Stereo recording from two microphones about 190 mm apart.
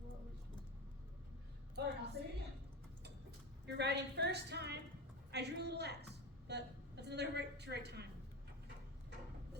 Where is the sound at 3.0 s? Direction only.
60° right (ahead or behind).